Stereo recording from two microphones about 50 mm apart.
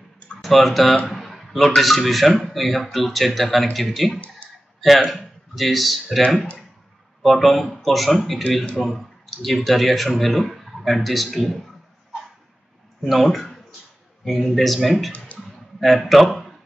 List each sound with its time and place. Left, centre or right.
0.4 s a man's voice: centre
4.4 s clicking: left
4.7 s speech: centre
7.2 s a man's voice: centre
13.0 s a man's voice: centre
15.3 s a sound: centre